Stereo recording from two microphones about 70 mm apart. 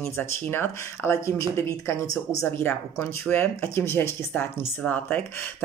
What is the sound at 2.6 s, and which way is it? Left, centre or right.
Speech, left.